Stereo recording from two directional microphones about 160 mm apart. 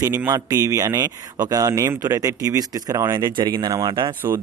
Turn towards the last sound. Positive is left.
turn(degrees=-25)  # may be behind; listen again after turning